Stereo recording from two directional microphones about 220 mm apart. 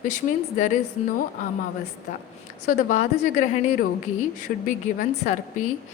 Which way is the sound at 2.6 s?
35° left (ahead or behind).